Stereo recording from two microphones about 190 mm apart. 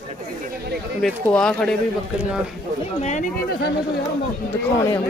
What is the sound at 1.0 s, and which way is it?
Speech, 5° left (ahead or behind).